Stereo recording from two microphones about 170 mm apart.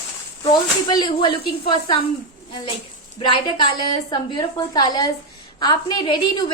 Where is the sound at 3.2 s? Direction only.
25° left (ahead or behind).